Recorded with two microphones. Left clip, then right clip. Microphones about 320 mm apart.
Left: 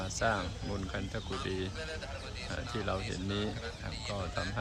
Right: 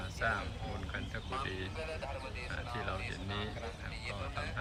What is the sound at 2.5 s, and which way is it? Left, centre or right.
Speech, centre.